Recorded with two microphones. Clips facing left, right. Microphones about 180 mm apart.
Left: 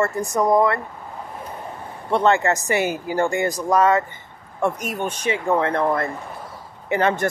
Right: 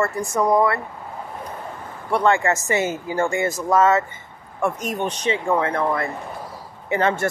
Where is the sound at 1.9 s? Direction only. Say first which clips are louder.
Left 1 dB; 25° left (ahead or behind).